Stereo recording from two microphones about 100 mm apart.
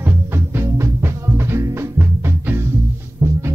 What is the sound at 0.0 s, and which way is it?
Music, 20° right (ahead or behind).